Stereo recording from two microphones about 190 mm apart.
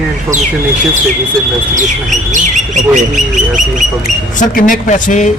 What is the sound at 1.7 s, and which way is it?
A man's voice, 40° right (ahead or behind).